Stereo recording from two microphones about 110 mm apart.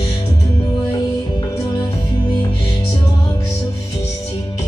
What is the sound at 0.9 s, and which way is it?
Music, 40° left (ahead or behind).